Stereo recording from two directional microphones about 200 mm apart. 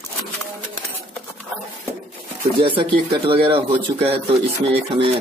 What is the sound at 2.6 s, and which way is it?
Speech, 25° right (ahead or behind).